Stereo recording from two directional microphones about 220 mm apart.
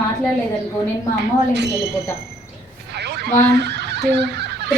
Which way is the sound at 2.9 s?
50° right (ahead or behind).